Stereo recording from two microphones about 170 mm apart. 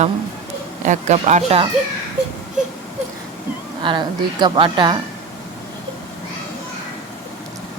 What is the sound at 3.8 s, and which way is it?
A woman's voice, 25° right (ahead or behind).